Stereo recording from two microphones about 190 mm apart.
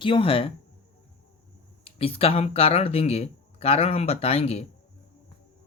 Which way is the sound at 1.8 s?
30° left (ahead or behind).